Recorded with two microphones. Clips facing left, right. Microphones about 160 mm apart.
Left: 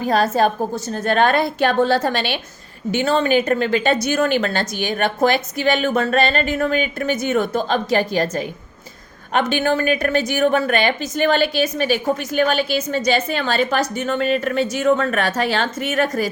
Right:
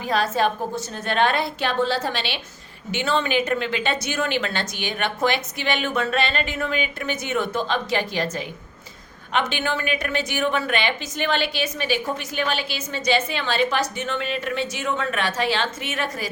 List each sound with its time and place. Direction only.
0.0 s a woman's voice: 40° left (ahead or behind)